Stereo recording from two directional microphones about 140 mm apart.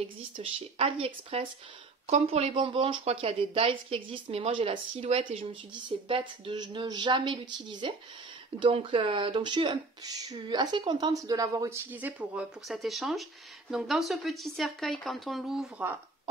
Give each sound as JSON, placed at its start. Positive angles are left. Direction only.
{"t": 0.4, "sound": "speech", "side_deg": -45}
{"t": 11.9, "sound": "speech", "side_deg": -10}